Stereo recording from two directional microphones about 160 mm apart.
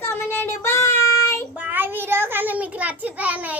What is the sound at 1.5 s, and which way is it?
A child's voice, 10° right (ahead or behind).